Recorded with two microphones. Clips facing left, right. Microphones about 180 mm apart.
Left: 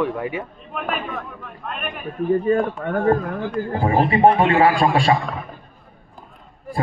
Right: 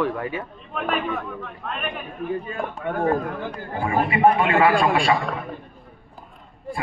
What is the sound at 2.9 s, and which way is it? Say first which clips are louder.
Speech: left 3 dB; 50° left (ahead or behind).